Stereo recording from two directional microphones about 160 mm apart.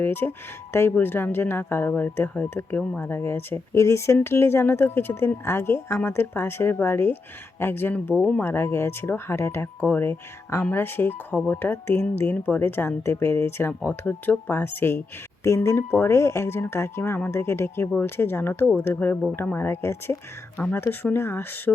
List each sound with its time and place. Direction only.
0.0 s speech: 15° left (ahead or behind)